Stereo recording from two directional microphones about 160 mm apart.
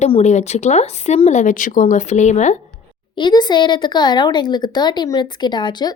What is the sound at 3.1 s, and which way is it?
Speech, 25° left (ahead or behind).